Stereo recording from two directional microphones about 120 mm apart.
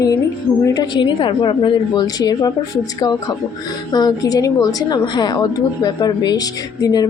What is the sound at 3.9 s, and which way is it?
A woman's voice, 30° left (ahead or behind).